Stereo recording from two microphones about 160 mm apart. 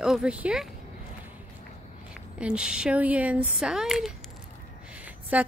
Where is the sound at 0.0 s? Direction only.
5° right (ahead or behind).